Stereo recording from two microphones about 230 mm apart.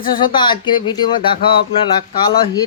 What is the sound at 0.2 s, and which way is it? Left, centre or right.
Speech, centre.